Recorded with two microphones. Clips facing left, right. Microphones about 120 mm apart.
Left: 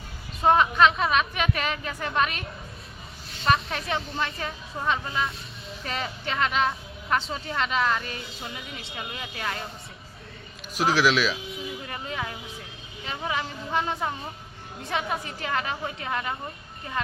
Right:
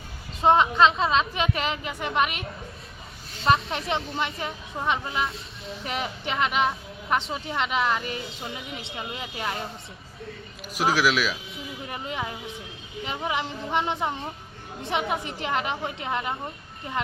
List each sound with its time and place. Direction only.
0.4 s a woman's voice: 25° right (ahead or behind)
3.4 s a woman's voice: 25° right (ahead or behind)
10.8 s a woman's voice: 10° right (ahead or behind)